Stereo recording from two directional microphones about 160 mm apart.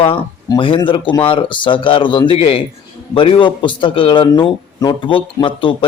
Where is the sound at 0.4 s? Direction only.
30° left (ahead or behind).